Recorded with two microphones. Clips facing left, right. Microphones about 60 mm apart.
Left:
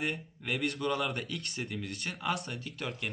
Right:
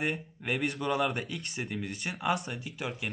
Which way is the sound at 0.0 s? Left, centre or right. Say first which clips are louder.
Right 3 dB; centre.